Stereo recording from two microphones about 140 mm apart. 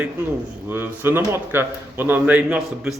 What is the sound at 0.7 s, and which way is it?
Speech, 15° right (ahead or behind).